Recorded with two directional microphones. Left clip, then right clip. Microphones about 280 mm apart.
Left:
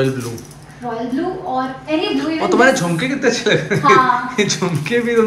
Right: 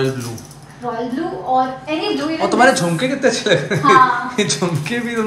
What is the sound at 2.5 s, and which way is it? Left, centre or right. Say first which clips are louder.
A woman's voice: even; centre.